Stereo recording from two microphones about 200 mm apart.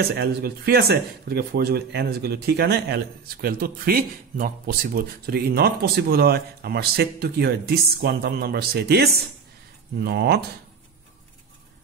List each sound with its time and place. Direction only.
0.0 s speech: 55° right (ahead or behind)